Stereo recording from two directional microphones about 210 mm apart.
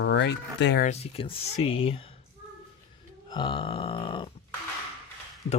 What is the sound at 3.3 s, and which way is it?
Speech, 25° left (ahead or behind).